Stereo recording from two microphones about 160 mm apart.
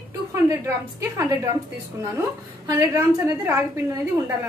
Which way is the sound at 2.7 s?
20° right (ahead or behind).